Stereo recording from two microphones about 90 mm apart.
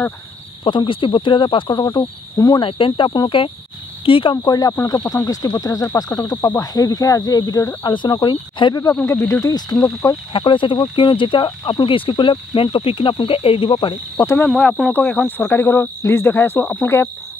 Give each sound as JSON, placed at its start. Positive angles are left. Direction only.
{"t": 0.7, "sound": "speech", "side_deg": 70}
{"t": 2.0, "sound": "cricket", "side_deg": 45}
{"t": 2.6, "sound": "speech", "side_deg": 70}
{"t": 4.5, "sound": "cricket", "side_deg": 45}
{"t": 5.1, "sound": "speech", "side_deg": 40}
{"t": 6.1, "sound": "cricket", "side_deg": 45}
{"t": 7.9, "sound": "speech", "side_deg": 60}
{"t": 8.9, "sound": "speech", "side_deg": 25}
{"t": 9.5, "sound": "cricket", "side_deg": 45}
{"t": 10.3, "sound": "speech", "side_deg": 70}
{"t": 12.7, "sound": "speech", "side_deg": 80}
{"t": 13.7, "sound": "speech", "side_deg": 55}
{"t": 14.1, "sound": "speech", "side_deg": 30}
{"t": 14.9, "sound": "speech", "side_deg": 20}